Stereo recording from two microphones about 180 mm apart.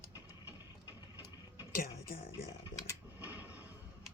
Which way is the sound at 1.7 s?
50° left (ahead or behind).